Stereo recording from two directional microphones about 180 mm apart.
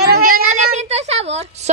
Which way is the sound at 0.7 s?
40° right (ahead or behind).